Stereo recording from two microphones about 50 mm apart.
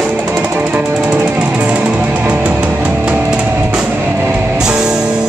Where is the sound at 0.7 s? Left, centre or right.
Right.